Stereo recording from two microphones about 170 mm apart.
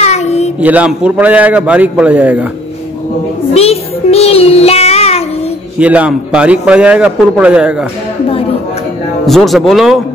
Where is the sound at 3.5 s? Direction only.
35° left (ahead or behind).